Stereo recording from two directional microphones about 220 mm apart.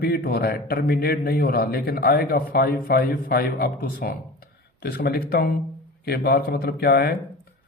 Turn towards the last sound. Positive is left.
turn(degrees=45)  # may be behind; listen again after turning